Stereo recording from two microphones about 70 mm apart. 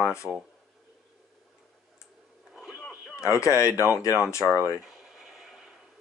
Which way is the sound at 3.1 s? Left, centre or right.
Left.